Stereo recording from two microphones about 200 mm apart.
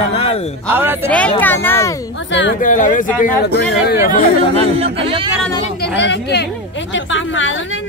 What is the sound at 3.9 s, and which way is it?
Speech, 55° left (ahead or behind).